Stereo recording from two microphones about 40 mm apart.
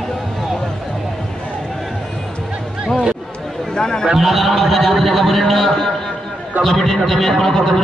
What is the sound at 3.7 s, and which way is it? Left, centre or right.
Speech, centre.